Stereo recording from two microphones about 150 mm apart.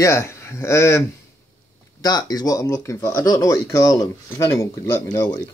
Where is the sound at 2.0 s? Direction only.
25° left (ahead or behind).